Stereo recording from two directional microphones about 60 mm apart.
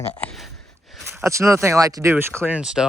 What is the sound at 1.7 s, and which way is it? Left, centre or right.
Speech, right.